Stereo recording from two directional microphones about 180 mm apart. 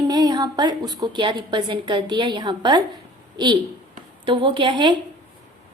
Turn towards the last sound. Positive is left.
turn(degrees=-25)  # may be behind; listen again after turning